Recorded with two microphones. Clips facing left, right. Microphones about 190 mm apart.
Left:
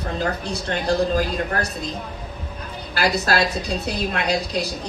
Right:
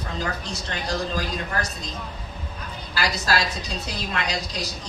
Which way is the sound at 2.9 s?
55° left (ahead or behind).